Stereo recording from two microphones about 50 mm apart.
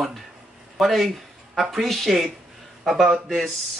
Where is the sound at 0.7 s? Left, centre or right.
Centre.